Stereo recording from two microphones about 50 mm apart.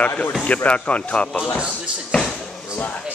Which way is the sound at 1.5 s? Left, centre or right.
Right.